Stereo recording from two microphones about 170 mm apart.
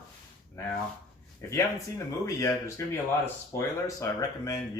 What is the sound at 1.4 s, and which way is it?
Speech, 15° left (ahead or behind).